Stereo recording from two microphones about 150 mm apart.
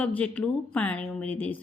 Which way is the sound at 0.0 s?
10° left (ahead or behind).